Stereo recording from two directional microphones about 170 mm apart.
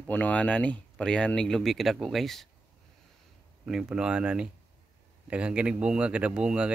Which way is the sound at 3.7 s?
5° right (ahead or behind).